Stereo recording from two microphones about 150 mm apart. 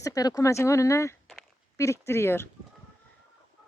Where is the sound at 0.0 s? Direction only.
25° left (ahead or behind).